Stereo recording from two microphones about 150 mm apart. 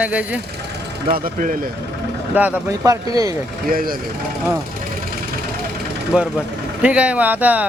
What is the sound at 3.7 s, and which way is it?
Speech, 70° right (ahead or behind).